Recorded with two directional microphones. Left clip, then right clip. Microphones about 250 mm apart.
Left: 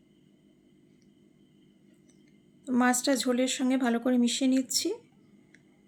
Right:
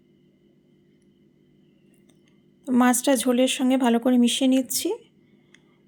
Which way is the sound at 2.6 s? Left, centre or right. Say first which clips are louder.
Right 5 dB; right.